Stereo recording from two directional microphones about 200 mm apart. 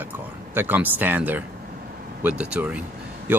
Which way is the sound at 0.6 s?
10° right (ahead or behind).